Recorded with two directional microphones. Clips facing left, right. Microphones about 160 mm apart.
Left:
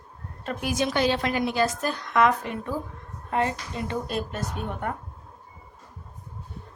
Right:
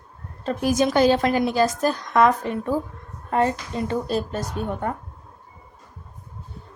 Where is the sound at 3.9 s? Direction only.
35° right (ahead or behind).